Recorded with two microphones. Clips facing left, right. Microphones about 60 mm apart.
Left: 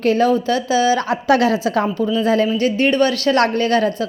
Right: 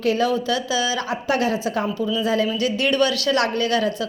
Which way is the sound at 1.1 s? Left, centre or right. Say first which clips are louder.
Left 6 dB; left.